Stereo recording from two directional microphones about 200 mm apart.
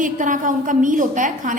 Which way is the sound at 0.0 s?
40° right (ahead or behind).